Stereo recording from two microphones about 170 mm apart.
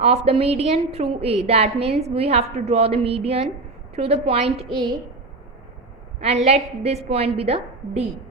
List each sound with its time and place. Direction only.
0.3 s a woman's voice: 35° right (ahead or behind)
6.1 s a woman's voice: 40° right (ahead or behind)